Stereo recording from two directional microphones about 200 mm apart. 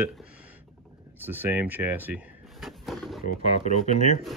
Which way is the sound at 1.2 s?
10° right (ahead or behind).